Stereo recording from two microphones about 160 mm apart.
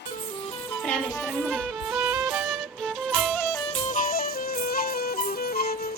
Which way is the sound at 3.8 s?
60° left (ahead or behind).